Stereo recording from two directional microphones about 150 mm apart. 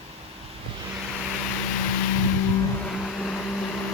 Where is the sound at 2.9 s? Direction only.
Centre (ahead or behind).